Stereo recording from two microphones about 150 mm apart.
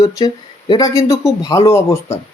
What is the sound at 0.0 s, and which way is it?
A man's voice, 20° left (ahead or behind).